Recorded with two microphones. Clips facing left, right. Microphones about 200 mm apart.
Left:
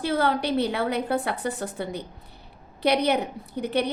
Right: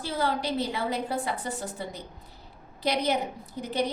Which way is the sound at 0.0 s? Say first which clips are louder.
Left 5 dB; 65° left (ahead or behind).